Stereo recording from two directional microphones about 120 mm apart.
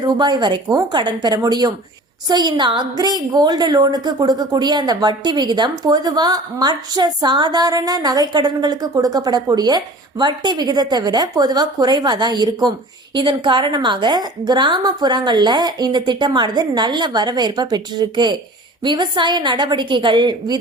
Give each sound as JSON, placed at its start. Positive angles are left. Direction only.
{"t": 0.0, "sound": "a woman's voice", "side_deg": -35}